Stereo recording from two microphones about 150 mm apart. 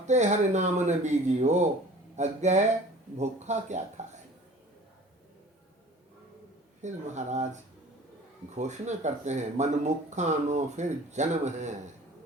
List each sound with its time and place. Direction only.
0.0 s speech: 50° right (ahead or behind)
6.8 s speech: 50° right (ahead or behind)
8.5 s speech: 50° right (ahead or behind)